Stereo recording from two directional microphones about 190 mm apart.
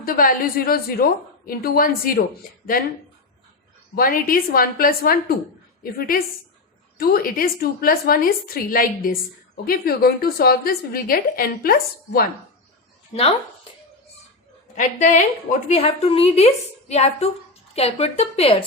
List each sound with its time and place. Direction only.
0.0 s a woman's voice: 50° left (ahead or behind)
3.9 s a woman's voice: 50° left (ahead or behind)
14.8 s a woman's voice: 40° left (ahead or behind)